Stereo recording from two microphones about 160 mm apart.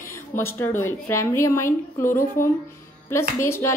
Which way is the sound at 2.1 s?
60° left (ahead or behind).